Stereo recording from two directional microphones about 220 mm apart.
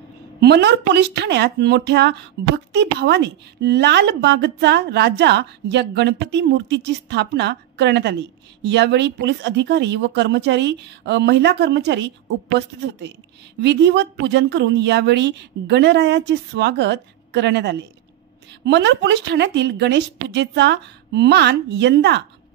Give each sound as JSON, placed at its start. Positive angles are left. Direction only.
{"t": 0.4, "sound": "a woman's voice", "side_deg": -50}
{"t": 13.6, "sound": "a woman's voice", "side_deg": -50}